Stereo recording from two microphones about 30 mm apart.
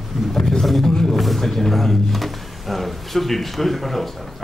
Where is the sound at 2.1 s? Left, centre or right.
Centre.